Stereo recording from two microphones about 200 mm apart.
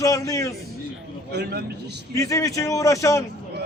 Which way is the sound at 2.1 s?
15° left (ahead or behind).